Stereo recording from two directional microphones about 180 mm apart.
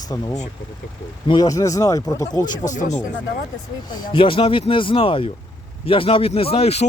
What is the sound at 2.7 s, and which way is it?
Speech, 40° left (ahead or behind).